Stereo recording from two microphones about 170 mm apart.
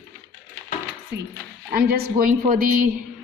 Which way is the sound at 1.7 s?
65° right (ahead or behind).